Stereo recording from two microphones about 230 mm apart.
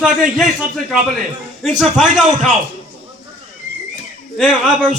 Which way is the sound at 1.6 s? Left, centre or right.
Centre.